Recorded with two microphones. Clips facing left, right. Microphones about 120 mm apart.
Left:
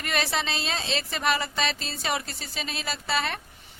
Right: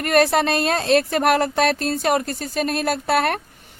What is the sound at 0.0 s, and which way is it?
A woman's voice, 55° right (ahead or behind).